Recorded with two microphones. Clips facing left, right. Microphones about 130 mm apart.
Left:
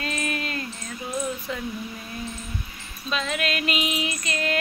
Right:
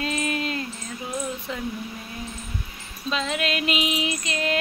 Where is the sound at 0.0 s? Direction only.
20° right (ahead or behind).